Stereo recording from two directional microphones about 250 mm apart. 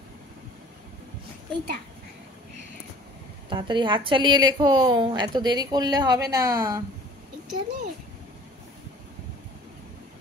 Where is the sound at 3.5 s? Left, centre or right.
Centre.